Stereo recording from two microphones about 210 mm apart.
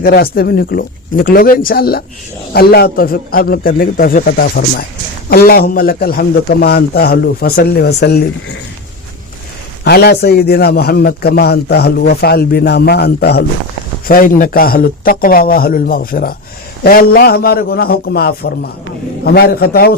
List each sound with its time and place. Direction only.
0.0 s a man's voice: 45° left (ahead or behind)
9.8 s a man's voice: 50° left (ahead or behind)